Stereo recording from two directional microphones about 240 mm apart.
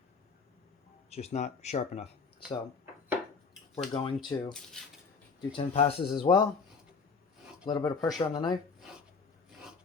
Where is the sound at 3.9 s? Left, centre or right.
Left.